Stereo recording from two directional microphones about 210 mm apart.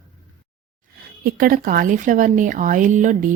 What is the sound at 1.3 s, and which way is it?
Speech, 40° right (ahead or behind).